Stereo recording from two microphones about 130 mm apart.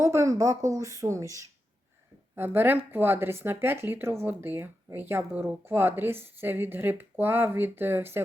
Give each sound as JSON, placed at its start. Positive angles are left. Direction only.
{"t": 0.0, "sound": "speech", "side_deg": -20}